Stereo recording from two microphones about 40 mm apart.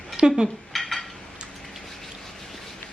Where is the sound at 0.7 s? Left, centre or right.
Centre.